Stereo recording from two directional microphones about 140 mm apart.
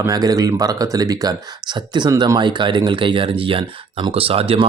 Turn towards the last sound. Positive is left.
turn(degrees=-40)  # may be behind; listen again after turning